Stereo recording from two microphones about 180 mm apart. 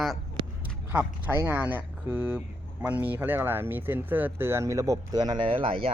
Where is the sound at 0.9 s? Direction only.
10° right (ahead or behind).